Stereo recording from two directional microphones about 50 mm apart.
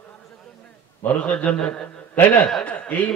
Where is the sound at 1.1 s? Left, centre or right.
Left.